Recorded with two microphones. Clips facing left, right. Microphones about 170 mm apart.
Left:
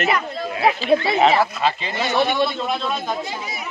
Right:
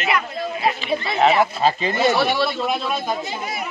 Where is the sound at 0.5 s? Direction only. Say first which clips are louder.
Left 6 dB; 75° left (ahead or behind).